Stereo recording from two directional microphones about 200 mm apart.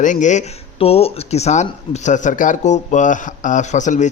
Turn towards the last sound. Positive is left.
turn(degrees=40)  # may be behind; listen again after turning